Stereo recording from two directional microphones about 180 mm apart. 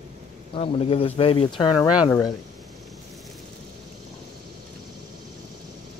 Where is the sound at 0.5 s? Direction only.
30° left (ahead or behind).